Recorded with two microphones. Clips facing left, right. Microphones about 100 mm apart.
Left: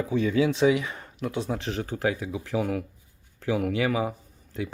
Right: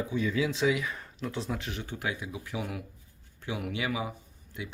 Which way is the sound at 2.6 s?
50° left (ahead or behind).